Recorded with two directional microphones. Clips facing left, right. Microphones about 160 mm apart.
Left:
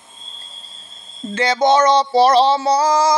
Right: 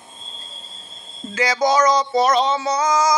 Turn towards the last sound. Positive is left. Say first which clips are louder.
# left 3 dB
turn(degrees=30)  # may be behind; listen again after turning